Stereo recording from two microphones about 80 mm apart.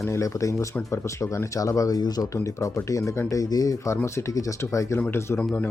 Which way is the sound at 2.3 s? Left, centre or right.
Left.